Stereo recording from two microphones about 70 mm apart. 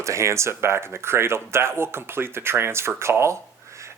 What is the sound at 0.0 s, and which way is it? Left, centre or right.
Speech, right.